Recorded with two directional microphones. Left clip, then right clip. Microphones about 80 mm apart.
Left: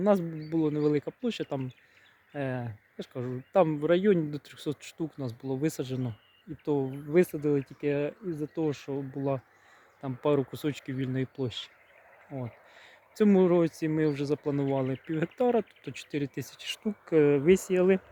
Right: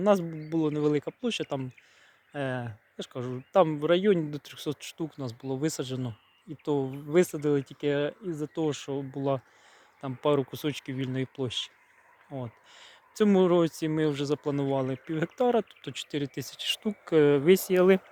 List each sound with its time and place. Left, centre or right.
0.0 s speech: centre
6.7 s speech: centre
10.0 s speech: centre
14.6 s speech: centre
15.5 s speech: centre
16.6 s speech: centre
17.7 s speech: centre